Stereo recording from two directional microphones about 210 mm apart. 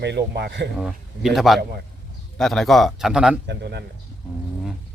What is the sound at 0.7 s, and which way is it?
Speech, centre (ahead or behind).